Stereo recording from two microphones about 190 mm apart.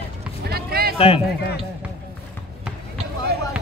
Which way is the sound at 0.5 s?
55° right (ahead or behind).